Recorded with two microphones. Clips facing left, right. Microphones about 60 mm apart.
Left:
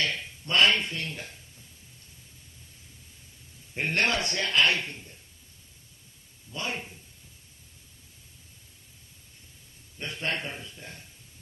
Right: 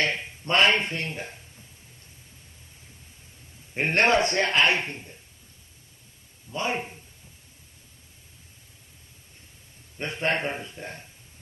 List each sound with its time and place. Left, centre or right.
0.0 s speech: right
3.7 s a man's voice: right
6.5 s speech: right
9.9 s a man's voice: right